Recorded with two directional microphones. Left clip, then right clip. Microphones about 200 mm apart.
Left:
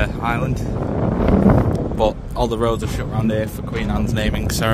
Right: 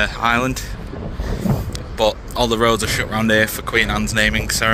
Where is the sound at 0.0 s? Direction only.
5° left (ahead or behind).